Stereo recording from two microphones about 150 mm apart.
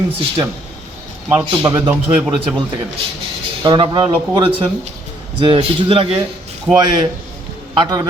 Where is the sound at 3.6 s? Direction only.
30° right (ahead or behind).